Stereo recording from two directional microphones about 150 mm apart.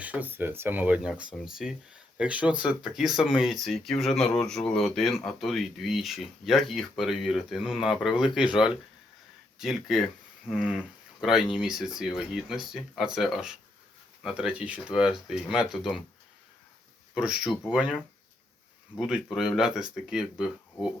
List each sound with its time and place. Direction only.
0.0 s speech: 10° right (ahead or behind)
8.2 s speech: 30° left (ahead or behind)
8.5 s speech: 5° right (ahead or behind)
17.2 s speech: 5° right (ahead or behind)
18.9 s speech: 5° right (ahead or behind)